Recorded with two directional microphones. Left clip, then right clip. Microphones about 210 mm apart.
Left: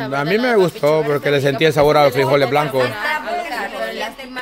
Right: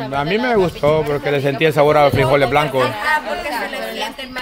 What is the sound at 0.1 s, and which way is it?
Speech, 25° left (ahead or behind).